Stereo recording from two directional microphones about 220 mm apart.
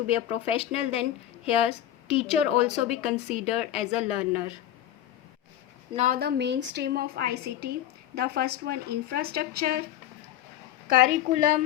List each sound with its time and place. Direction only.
0.1 s speech: 25° left (ahead or behind)
2.9 s speech: 5° right (ahead or behind)
3.3 s speech: 30° left (ahead or behind)
6.0 s a woman's voice: 40° right (ahead or behind)
10.8 s a woman's voice: 40° right (ahead or behind)